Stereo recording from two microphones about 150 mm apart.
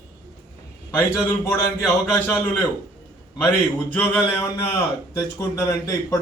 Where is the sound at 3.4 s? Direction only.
10° left (ahead or behind).